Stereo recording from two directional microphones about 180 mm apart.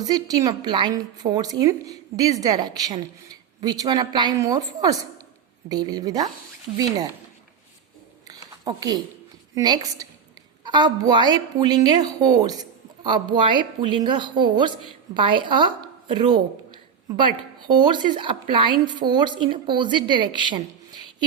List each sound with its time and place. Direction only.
0.0 s a woman's voice: 20° right (ahead or behind)
8.3 s a sound: 20° right (ahead or behind)
9.6 s a woman's voice: 20° right (ahead or behind)
17.7 s a woman's voice: 25° right (ahead or behind)